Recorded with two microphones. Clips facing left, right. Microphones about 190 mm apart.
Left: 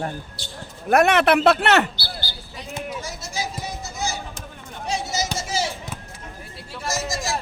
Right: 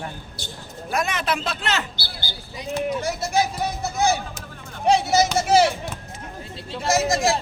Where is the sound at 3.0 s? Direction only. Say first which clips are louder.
Right 8 dB; 60° right (ahead or behind).